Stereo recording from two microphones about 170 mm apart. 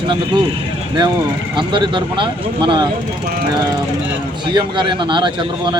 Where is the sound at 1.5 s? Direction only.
30° right (ahead or behind).